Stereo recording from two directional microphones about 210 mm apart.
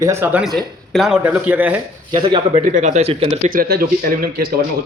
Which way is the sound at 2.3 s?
35° right (ahead or behind).